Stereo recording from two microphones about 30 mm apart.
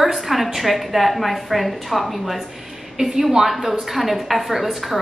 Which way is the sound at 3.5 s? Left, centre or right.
Centre.